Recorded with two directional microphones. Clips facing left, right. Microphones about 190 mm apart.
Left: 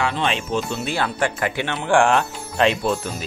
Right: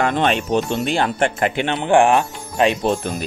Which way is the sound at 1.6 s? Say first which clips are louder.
Right 3 dB; 20° right (ahead or behind).